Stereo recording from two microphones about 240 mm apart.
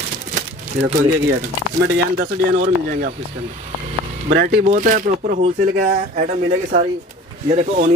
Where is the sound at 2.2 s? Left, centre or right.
Right.